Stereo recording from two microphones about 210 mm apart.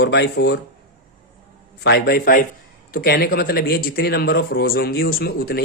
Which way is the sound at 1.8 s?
50° left (ahead or behind).